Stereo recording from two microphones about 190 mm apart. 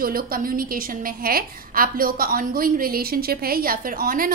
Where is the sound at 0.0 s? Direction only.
50° right (ahead or behind).